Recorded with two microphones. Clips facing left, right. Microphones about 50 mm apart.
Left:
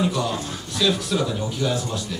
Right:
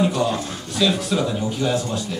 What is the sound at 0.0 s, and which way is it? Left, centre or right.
Speech, right.